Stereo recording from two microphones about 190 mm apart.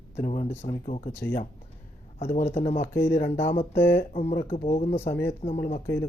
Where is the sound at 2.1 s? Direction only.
35° left (ahead or behind).